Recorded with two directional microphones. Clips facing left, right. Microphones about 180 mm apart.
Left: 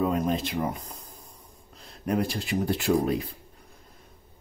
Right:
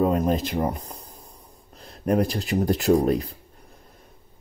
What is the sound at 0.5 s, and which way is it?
Speech, 40° right (ahead or behind).